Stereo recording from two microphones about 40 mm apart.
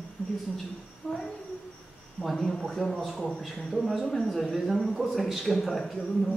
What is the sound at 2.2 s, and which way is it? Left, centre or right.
A woman's voice, centre.